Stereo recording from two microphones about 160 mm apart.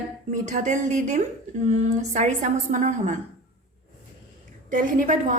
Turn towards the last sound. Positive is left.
turn(degrees=-55)  # may be behind; listen again after turning